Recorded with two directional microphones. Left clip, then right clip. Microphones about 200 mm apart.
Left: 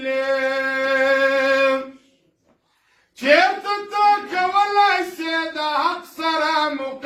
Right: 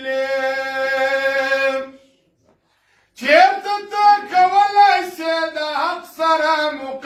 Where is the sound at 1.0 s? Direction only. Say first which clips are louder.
Left 2 dB; 15° right (ahead or behind).